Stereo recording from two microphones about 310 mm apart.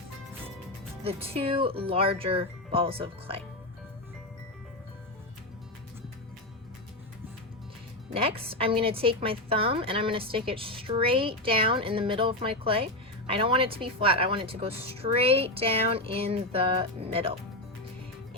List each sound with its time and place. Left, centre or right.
1.0 s a woman's voice: centre
8.1 s a woman's voice: centre